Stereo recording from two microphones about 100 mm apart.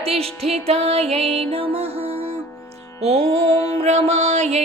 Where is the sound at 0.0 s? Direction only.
90° right.